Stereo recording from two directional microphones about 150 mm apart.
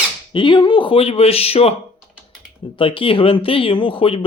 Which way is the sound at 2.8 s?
35° left (ahead or behind).